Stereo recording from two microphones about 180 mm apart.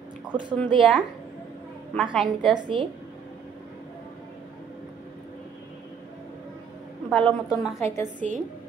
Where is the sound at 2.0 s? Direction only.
Centre (ahead or behind).